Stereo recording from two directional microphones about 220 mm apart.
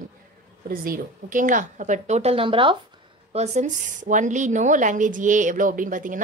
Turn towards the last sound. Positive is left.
turn(degrees=-35)  # may be behind; listen again after turning